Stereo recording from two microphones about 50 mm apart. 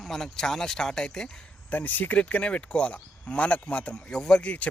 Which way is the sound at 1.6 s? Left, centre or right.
Left.